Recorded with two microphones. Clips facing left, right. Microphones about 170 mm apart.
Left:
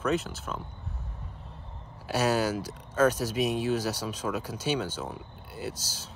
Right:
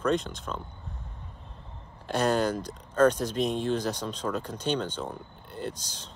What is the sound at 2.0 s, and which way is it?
Speech, 5° left (ahead or behind).